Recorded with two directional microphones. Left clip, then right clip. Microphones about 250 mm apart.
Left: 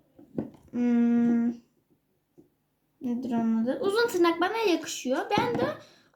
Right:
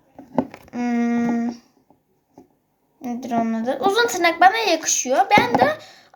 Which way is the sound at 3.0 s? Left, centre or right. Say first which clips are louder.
Right 7 dB; centre.